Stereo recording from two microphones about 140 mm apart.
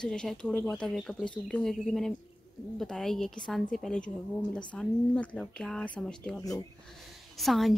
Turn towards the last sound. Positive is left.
turn(degrees=0)  # may be behind; listen again after turning